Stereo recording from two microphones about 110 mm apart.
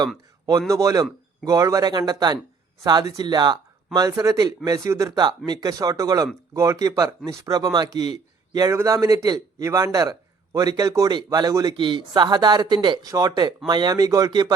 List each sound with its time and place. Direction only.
0.7 s speech: 30° right (ahead or behind)
8.7 s speech: 25° right (ahead or behind)